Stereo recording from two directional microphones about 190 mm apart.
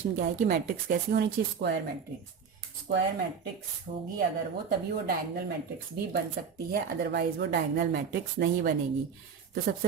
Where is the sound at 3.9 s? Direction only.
40° right (ahead or behind).